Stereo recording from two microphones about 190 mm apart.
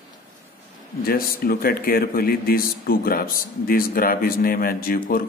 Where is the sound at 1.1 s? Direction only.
50° left (ahead or behind).